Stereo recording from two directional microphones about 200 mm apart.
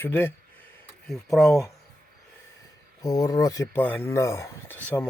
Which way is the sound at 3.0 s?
15° left (ahead or behind).